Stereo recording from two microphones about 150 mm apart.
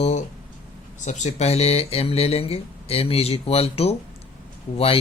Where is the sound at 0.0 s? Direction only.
50° left (ahead or behind).